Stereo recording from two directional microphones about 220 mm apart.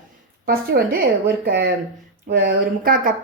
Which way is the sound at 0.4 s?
40° right (ahead or behind).